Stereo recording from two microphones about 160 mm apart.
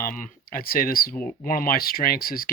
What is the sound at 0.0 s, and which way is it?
Speech, 60° left (ahead or behind).